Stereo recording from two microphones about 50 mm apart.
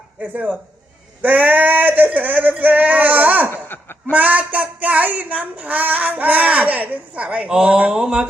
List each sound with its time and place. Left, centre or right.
0.2 s child singing: right
3.7 s chuckle: left
4.1 s child singing: right
7.9 s mantra: centre